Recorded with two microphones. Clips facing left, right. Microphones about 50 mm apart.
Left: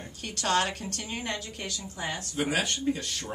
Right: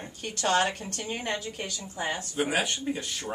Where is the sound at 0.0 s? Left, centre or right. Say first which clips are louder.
Right 3 dB; right.